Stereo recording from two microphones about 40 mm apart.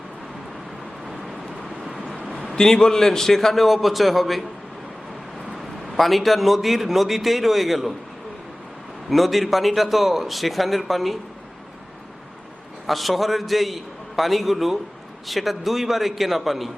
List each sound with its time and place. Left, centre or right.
1.8 s vehicle: centre
2.6 s a man's voice: centre
6.0 s a man's voice: centre
9.0 s a man's voice: centre
12.9 s a man's voice: centre